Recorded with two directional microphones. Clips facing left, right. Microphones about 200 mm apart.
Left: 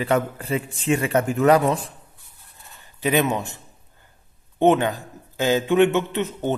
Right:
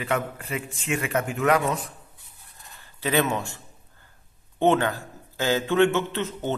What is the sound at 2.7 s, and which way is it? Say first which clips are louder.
Speech: left 3 dB; 15° left (ahead or behind).